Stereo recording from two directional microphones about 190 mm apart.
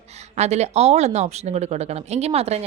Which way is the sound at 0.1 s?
35° right (ahead or behind).